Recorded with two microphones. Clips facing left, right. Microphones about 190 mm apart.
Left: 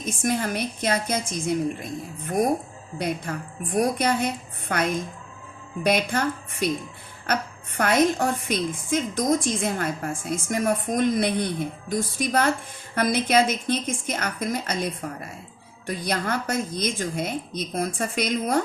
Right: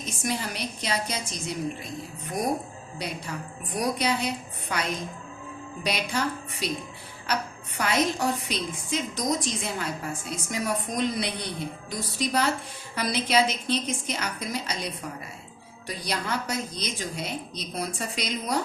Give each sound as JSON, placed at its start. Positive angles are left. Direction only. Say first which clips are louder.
{"t": 0.0, "sound": "a woman's voice", "louder": "left 5 dB", "side_deg": 50}